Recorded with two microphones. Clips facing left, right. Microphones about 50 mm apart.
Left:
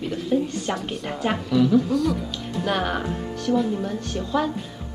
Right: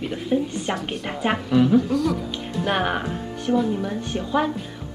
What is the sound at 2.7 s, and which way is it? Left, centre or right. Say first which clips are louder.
A woman's voice: right 2 dB; right.